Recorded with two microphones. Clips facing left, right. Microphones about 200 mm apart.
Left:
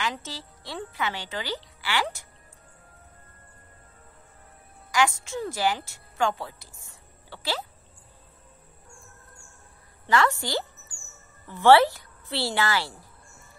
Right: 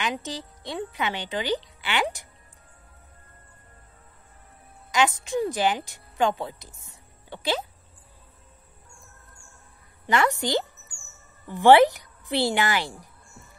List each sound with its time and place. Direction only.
0.0 s speech: 15° right (ahead or behind)
4.9 s a woman's voice: 20° right (ahead or behind)
10.0 s a woman's voice: 20° right (ahead or behind)